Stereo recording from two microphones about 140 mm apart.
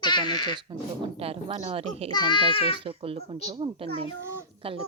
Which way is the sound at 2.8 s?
40° right (ahead or behind).